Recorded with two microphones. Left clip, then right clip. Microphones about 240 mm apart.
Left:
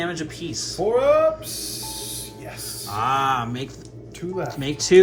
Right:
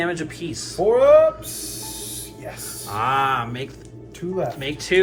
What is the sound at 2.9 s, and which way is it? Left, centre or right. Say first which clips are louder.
Speech: right 1 dB; centre.